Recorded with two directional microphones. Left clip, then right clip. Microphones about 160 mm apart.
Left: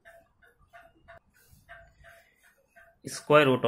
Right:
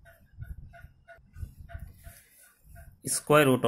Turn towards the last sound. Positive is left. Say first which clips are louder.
# left 1 dB
turn(degrees=-25)  # may be behind; listen again after turning